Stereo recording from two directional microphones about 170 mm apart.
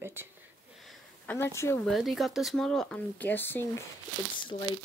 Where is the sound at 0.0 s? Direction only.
15° right (ahead or behind).